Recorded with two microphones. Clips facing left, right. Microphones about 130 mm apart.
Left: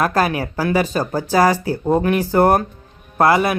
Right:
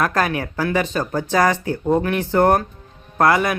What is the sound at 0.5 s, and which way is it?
Speech, 35° left (ahead or behind).